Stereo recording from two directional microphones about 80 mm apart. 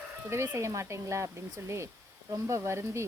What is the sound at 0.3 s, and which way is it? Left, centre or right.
Speech, right.